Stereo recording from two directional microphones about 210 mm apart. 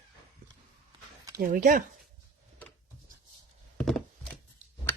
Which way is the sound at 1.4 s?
45° right (ahead or behind).